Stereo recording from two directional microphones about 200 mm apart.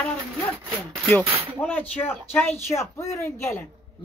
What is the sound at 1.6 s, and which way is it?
Speech, 10° left (ahead or behind).